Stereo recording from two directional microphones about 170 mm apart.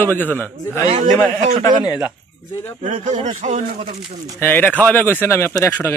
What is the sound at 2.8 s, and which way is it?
Speech, 45° right (ahead or behind).